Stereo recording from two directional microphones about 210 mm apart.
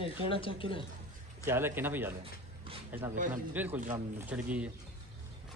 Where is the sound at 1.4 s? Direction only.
10° right (ahead or behind).